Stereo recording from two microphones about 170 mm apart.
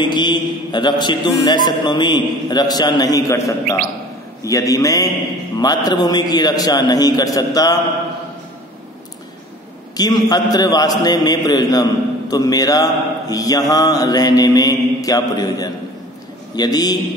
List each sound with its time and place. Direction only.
0.0 s mantra: 25° left (ahead or behind)
9.9 s mantra: 25° left (ahead or behind)